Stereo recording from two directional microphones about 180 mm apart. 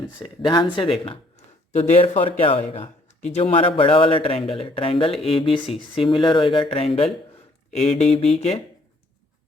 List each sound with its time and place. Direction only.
0.2 s speech: 25° left (ahead or behind)
1.7 s speech: 40° left (ahead or behind)